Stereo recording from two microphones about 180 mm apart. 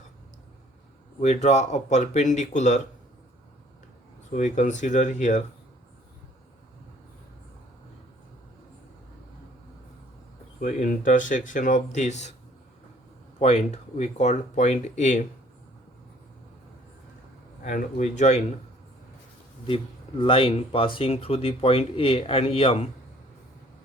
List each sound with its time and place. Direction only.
1.2 s speech: 40° left (ahead or behind)
4.4 s speech: 45° left (ahead or behind)
10.6 s speech: 45° left (ahead or behind)
13.4 s speech: 35° left (ahead or behind)
17.6 s speech: 45° left (ahead or behind)
19.6 s speech: 30° left (ahead or behind)